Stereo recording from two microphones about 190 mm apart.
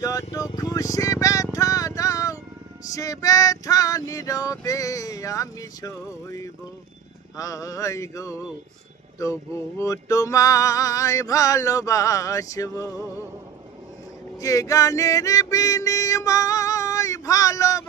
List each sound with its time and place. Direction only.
0.0 s speech: 15° left (ahead or behind)
2.9 s music: 15° left (ahead or behind)
14.4 s music: 15° left (ahead or behind)